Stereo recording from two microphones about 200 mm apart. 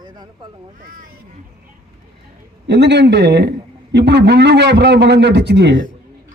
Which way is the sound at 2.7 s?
60° right (ahead or behind).